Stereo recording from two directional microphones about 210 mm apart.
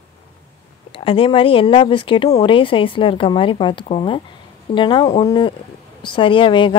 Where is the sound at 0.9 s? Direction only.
25° left (ahead or behind).